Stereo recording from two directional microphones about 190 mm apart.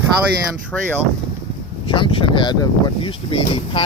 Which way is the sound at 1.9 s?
25° left (ahead or behind).